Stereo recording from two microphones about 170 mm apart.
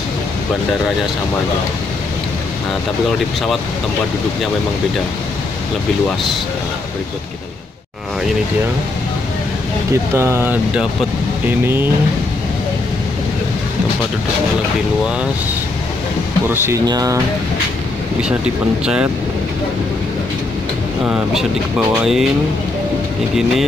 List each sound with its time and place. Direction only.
10.1 s speech: 15° right (ahead or behind)
16.8 s speech: 20° right (ahead or behind)
21.0 s speech: 5° right (ahead or behind)